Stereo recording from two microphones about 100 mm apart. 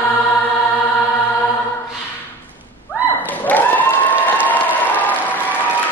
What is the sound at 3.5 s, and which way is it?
Applause, 15° left (ahead or behind).